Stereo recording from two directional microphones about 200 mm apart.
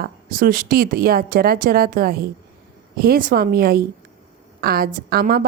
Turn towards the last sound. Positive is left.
turn(degrees=-50)  # may be behind; listen again after turning